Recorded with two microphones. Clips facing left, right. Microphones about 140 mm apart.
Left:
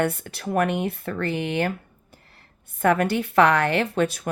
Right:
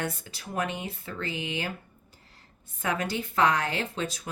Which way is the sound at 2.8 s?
60° left (ahead or behind).